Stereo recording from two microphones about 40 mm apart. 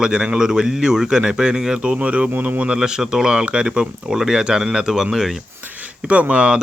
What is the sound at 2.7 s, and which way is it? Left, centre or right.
Speech, centre.